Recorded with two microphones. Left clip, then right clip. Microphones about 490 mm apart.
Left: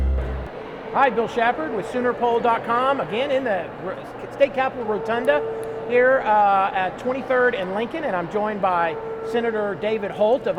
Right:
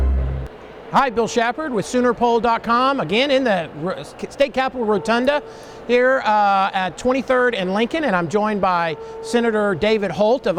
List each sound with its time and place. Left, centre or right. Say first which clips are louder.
0.9 s speech: right 2 dB; right